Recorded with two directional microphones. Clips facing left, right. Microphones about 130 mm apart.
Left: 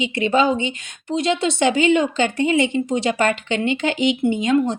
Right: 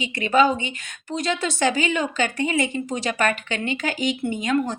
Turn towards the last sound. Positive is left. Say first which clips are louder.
# left 5 dB
turn(degrees=25)  # may be behind; listen again after turning